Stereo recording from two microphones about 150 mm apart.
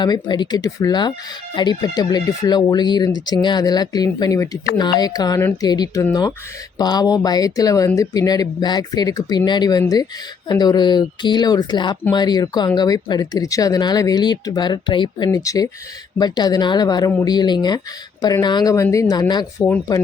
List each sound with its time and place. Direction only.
0.0 s speech: 30° left (ahead or behind)